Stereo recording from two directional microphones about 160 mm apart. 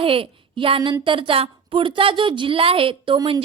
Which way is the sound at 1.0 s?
30° right (ahead or behind).